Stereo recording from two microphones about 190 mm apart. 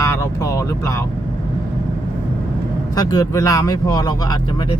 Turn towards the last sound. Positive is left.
turn(degrees=20)  # may be behind; listen again after turning